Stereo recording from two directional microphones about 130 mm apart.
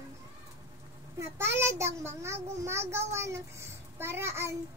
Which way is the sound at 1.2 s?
20° right (ahead or behind).